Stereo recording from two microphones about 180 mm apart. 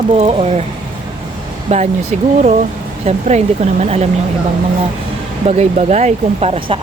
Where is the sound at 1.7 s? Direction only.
40° right (ahead or behind).